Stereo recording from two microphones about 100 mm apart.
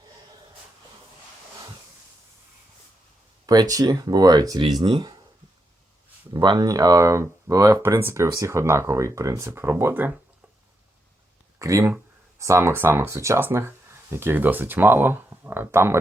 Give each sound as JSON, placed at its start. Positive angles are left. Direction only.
{"t": 3.4, "sound": "speech", "side_deg": -40}
{"t": 4.8, "sound": "speech", "side_deg": -55}
{"t": 6.3, "sound": "speech", "side_deg": -45}
{"t": 11.6, "sound": "speech", "side_deg": -30}